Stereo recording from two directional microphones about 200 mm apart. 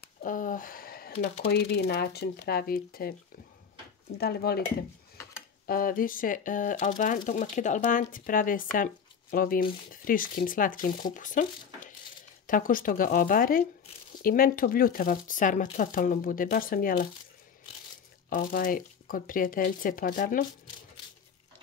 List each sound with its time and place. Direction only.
0.0 s a sound: 45° left (ahead or behind)
1.1 s speech: 30° left (ahead or behind)
1.5 s speech: 55° left (ahead or behind)
4.2 s speech: 50° left (ahead or behind)
18.3 s speech: 45° left (ahead or behind)